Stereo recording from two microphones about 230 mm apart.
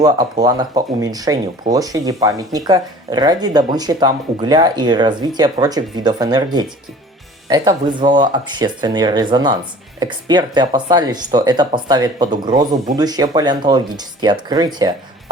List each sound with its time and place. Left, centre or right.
0.0 s speech: centre